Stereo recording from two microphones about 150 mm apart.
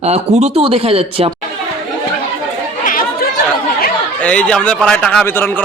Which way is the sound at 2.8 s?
65° left (ahead or behind).